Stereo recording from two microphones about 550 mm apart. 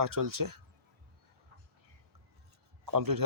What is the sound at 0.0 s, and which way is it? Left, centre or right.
Speech, right.